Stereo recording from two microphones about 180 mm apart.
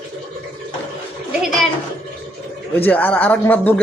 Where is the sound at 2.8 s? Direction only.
10° left (ahead or behind).